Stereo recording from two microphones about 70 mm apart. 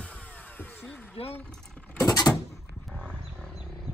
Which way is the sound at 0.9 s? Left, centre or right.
Left.